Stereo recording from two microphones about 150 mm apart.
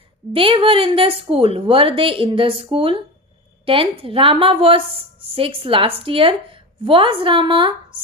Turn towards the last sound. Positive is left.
turn(degrees=-35)  # may be behind; listen again after turning